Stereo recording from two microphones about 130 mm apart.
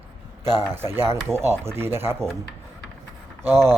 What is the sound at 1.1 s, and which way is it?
Speech, 20° right (ahead or behind).